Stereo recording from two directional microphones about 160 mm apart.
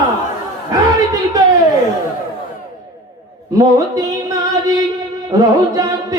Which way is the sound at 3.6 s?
20° right (ahead or behind).